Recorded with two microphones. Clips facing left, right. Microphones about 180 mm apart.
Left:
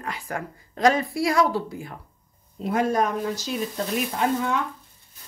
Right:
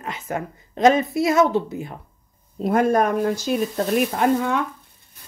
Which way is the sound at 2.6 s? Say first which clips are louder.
Right 4 dB; 50° right (ahead or behind).